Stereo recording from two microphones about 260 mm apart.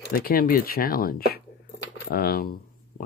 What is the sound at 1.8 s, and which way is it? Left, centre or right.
Keys jangling, left.